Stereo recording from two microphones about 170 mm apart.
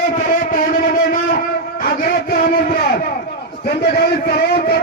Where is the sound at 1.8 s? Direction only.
60° left (ahead or behind).